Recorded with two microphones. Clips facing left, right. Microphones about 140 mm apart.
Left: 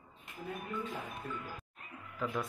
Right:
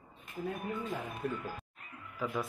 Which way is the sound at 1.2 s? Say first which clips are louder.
Right 9 dB; 75° right (ahead or behind).